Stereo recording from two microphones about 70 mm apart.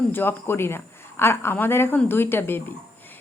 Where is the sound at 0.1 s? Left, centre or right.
Left.